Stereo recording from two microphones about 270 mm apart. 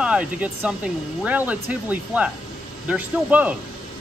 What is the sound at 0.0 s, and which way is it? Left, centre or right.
Speech, centre.